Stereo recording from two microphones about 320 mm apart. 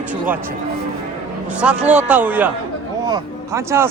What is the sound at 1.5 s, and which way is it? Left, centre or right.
A man's voice, centre.